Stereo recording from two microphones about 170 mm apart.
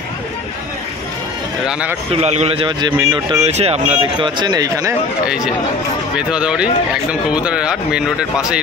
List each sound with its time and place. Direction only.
1.7 s speech: 5° right (ahead or behind)
2.1 s a man's voice: 40° right (ahead or behind)
3.4 s speech: 40° right (ahead or behind); by 4.9 s 20° right (ahead or behind)
6.1 s speech: 5° right (ahead or behind)